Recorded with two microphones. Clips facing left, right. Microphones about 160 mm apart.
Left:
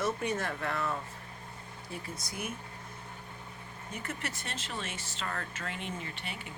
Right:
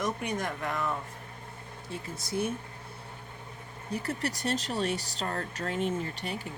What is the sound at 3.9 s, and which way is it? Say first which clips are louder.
Speech: right 7 dB; 35° right (ahead or behind).